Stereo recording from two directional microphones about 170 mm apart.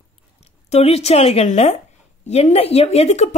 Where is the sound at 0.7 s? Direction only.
40° left (ahead or behind).